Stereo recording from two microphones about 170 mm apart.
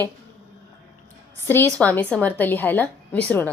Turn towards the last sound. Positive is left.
turn(degrees=10)  # may be behind; listen again after turning